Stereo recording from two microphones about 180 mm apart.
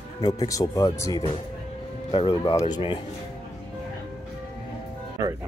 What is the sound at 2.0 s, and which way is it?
Speech, 30° left (ahead or behind).